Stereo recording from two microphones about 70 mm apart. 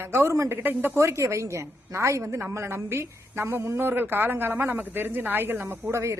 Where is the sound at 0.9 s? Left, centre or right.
Right.